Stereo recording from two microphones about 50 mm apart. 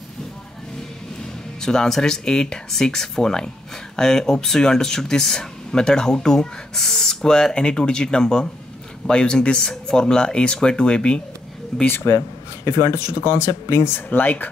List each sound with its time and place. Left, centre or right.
1.6 s speech: centre
11.7 s speech: centre
12.6 s speech: left
13.9 s speech: left